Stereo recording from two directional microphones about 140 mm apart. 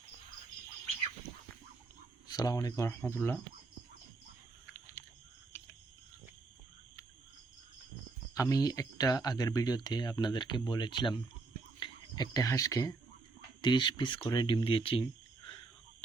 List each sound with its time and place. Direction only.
2.3 s speech: 30° left (ahead or behind)
4.6 s a sound: 20° left (ahead or behind)
5.5 s cricket: 20° left (ahead or behind)
8.4 s speech: 25° left (ahead or behind); by 15.0 s 40° left (ahead or behind)